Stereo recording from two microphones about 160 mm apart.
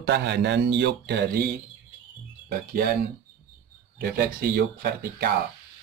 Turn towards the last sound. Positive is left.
turn(degrees=-75)  # may be behind; listen again after turning